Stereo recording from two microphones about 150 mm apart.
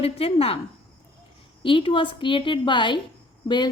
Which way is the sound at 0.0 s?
40° left (ahead or behind).